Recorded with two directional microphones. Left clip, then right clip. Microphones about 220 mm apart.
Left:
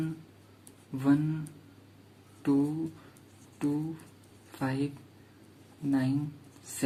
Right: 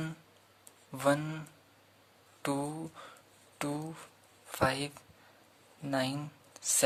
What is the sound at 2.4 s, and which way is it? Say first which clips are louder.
Speech: left 6 dB; 45° right (ahead or behind).